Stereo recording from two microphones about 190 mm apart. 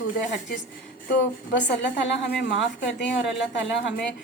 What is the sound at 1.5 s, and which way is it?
A woman's voice, 70° left (ahead or behind).